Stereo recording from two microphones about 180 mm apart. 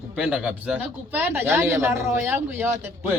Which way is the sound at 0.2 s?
5° right (ahead or behind).